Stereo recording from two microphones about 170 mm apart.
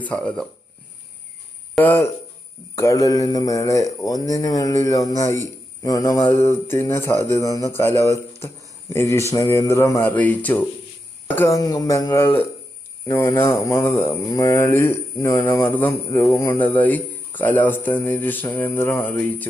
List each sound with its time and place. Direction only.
0.0 s speech: 10° left (ahead or behind)
1.8 s speech: 10° left (ahead or behind)